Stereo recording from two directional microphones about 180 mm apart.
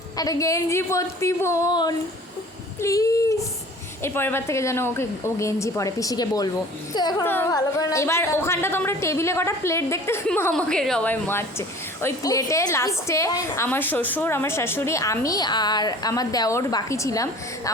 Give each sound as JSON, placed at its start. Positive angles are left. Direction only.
{"t": 0.2, "sound": "a woman's voice", "side_deg": 20}
{"t": 7.3, "sound": "a woman's voice", "side_deg": 15}